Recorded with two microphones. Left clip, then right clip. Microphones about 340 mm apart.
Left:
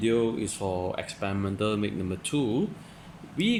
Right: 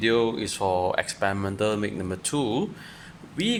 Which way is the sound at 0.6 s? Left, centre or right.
Right.